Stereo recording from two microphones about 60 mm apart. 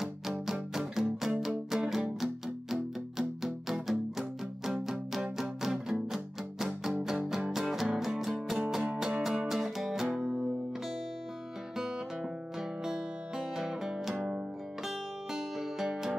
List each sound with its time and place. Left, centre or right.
0.0 s music: centre
10.2 s music: centre
12.8 s music: centre